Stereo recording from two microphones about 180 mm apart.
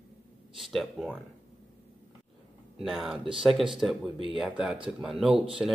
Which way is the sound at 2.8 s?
Centre (ahead or behind).